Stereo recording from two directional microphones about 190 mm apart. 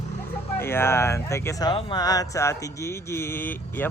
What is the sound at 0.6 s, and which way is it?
Speech, 10° left (ahead or behind).